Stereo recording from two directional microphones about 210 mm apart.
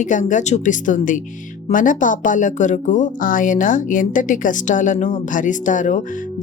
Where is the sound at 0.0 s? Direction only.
35° left (ahead or behind).